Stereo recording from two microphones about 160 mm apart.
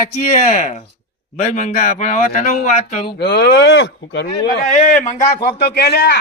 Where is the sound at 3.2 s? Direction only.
90° left.